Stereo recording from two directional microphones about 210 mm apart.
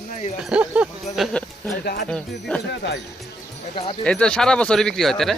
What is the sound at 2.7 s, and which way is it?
Speech, 55° left (ahead or behind).